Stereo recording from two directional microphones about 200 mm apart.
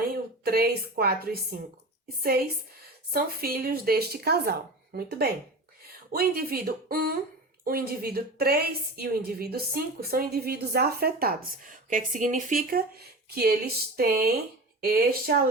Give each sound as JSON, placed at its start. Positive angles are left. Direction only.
{"t": 0.4, "sound": "a woman's voice", "side_deg": -50}
{"t": 12.7, "sound": "a woman's voice", "side_deg": -50}